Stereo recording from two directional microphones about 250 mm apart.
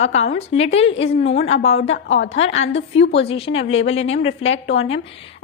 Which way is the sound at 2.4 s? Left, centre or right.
Left.